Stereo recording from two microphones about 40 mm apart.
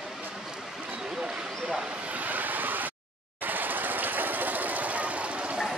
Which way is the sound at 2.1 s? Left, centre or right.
Right.